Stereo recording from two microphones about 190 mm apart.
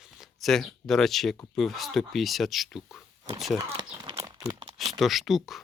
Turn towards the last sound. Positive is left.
turn(degrees=0)  # may be behind; listen again after turning